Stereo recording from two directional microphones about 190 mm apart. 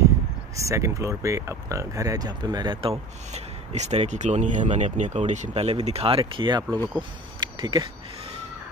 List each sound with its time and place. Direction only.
0.6 s speech: 15° right (ahead or behind)